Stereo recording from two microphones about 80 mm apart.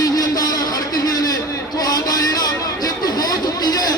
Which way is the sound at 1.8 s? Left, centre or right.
Left.